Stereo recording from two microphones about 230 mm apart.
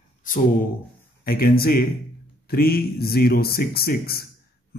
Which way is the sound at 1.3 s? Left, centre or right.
Left.